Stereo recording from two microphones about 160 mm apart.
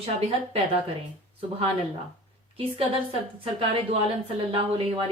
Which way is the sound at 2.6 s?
35° right (ahead or behind).